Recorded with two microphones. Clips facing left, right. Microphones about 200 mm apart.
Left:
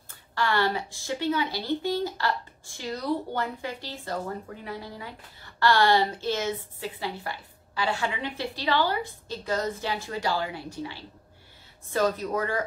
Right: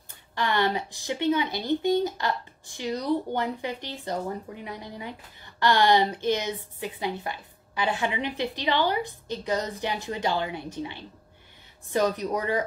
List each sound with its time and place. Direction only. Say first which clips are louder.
0.3 s speech: even; 20° right (ahead or behind)